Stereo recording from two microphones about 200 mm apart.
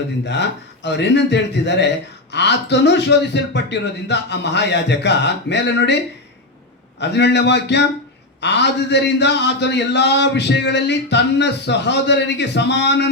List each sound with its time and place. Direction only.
0.3 s a man's voice: 60° left (ahead or behind)
7.0 s a man's voice: 60° left (ahead or behind)